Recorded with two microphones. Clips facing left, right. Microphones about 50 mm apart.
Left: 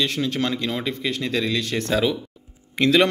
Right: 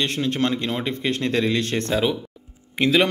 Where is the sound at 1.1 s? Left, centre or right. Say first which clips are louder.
Right 3 dB; right.